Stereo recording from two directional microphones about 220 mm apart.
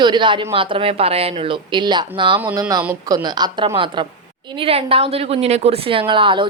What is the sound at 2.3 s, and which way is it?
A woman's voice, 10° right (ahead or behind).